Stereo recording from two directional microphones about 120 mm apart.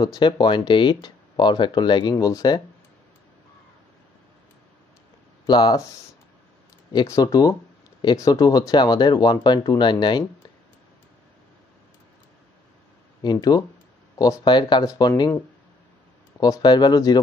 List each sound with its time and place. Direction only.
0.0 s speech: 40° left (ahead or behind)
5.5 s speech: 35° left (ahead or behind)
7.1 s speech: 30° left (ahead or behind)
13.2 s speech: 35° left (ahead or behind)
16.3 s speech: 30° left (ahead or behind)